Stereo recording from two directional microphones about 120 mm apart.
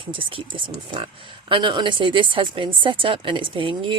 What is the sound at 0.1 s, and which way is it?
Speech, 45° right (ahead or behind).